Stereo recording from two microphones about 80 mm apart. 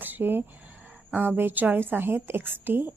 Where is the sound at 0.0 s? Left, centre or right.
Right.